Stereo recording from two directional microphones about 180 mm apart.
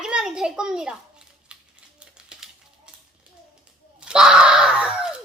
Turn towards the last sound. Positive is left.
turn(degrees=-5)  # may be behind; listen again after turning